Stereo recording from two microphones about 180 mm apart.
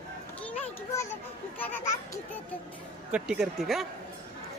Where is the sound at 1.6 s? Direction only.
15° left (ahead or behind).